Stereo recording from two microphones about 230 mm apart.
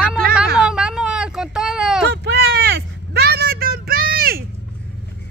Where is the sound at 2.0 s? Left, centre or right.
Right.